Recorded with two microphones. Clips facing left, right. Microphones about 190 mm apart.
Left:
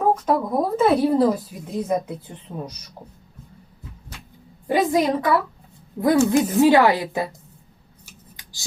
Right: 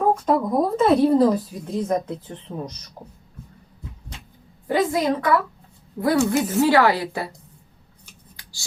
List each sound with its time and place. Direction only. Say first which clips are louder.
0.0 s a woman's voice: even; centre (ahead or behind)
4.7 s speech: left 1 dB; 15° left (ahead or behind)